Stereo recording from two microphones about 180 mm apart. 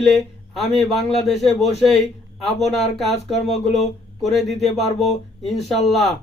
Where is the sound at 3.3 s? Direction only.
40° left (ahead or behind).